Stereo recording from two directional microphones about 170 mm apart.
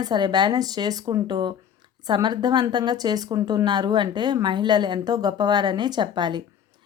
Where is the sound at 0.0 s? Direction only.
25° right (ahead or behind).